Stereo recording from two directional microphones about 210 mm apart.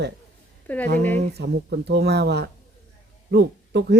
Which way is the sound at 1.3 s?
50° right (ahead or behind).